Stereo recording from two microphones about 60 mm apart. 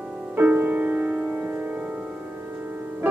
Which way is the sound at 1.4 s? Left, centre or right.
Right.